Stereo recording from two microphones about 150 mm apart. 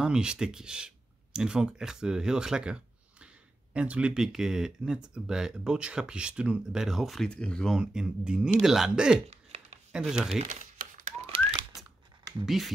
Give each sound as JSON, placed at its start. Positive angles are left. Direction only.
{"t": 0.0, "sound": "speech", "side_deg": -5}
{"t": 9.3, "sound": "a sound", "side_deg": -45}
{"t": 9.9, "sound": "speech", "side_deg": -5}
{"t": 10.4, "sound": "crumpling", "side_deg": -55}
{"t": 11.2, "sound": "typewriter", "side_deg": -40}
{"t": 12.4, "sound": "speech", "side_deg": 0}